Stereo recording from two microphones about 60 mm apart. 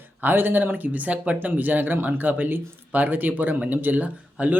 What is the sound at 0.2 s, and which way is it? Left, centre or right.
Speech, right.